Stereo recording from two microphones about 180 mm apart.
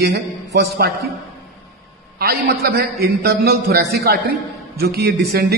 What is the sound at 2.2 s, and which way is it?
A man's voice, 60° right (ahead or behind).